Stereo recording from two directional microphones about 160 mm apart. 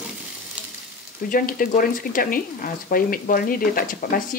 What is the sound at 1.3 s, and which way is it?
Speech, 60° left (ahead or behind).